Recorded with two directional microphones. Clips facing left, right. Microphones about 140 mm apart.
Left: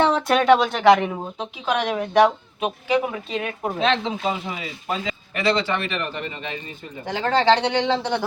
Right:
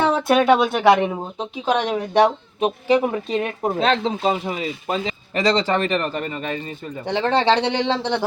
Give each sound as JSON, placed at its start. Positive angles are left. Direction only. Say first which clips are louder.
{"t": 0.0, "sound": "speech", "louder": "right 1 dB", "side_deg": -10}
{"t": 1.6, "sound": "speech", "louder": "right 2 dB", "side_deg": -25}
{"t": 7.0, "sound": "speech", "louder": "right 1 dB", "side_deg": -30}